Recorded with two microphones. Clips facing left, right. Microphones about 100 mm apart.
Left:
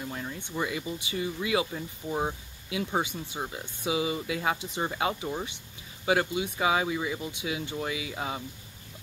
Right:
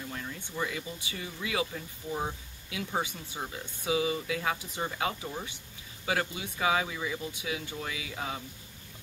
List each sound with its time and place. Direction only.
0.1 s speech: 25° left (ahead or behind)